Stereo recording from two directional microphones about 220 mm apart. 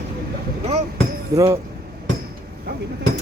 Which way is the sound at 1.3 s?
15° right (ahead or behind).